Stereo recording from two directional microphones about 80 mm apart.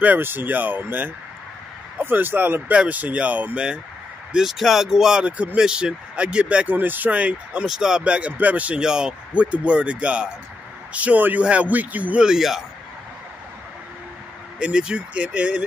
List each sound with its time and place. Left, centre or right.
0.0 s speech: right
7.6 s speech: centre
14.6 s speech: centre